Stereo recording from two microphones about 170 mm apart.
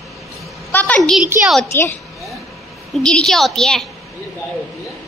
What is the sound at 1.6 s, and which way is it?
Speech, 15° left (ahead or behind).